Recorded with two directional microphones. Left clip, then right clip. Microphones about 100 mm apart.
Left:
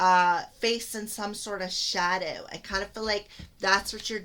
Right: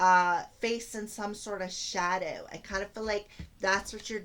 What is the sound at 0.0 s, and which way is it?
Speech, 35° left (ahead or behind).